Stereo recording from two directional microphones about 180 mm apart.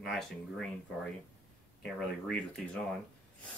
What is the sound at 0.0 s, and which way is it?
Speech, centre (ahead or behind).